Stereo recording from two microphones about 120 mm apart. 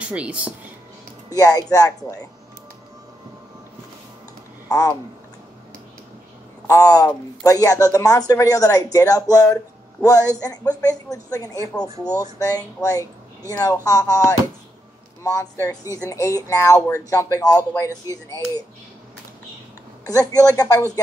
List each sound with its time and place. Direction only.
0.0 s speech: 10° right (ahead or behind)
1.3 s speech: 30° left (ahead or behind)
4.6 s speech: 30° left (ahead or behind)
6.7 s a woman's voice: 30° left (ahead or behind)
20.1 s a woman's voice: 30° left (ahead or behind)